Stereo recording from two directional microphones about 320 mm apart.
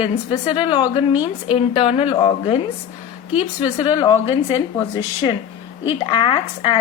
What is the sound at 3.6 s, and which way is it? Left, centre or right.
A woman's voice, centre.